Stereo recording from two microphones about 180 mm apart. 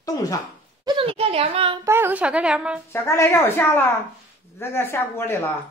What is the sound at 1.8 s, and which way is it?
Speech, 15° right (ahead or behind).